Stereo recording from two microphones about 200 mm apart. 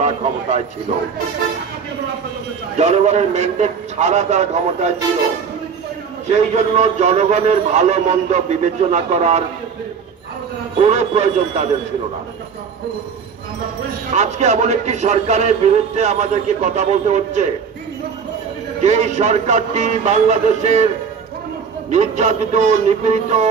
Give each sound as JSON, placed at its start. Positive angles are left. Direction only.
{"t": 0.0, "sound": "a sound", "side_deg": -35}
{"t": 2.8, "sound": "a man's voice", "side_deg": -35}
{"t": 6.2, "sound": "a man's voice", "side_deg": -35}
{"t": 10.8, "sound": "a man's voice", "side_deg": -35}
{"t": 14.1, "sound": "a man's voice", "side_deg": -35}
{"t": 18.8, "sound": "a man's voice", "side_deg": -35}
{"t": 21.9, "sound": "a man's voice", "side_deg": -35}